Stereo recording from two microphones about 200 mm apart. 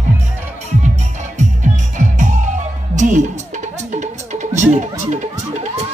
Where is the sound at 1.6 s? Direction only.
40° right (ahead or behind).